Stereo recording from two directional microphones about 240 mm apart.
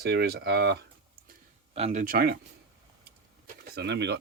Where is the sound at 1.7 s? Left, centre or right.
Right.